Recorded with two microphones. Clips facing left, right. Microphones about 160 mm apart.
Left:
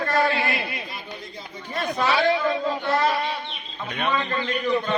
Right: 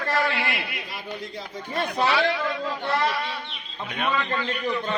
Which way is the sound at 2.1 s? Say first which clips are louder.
Left 3 dB; 35° left (ahead or behind).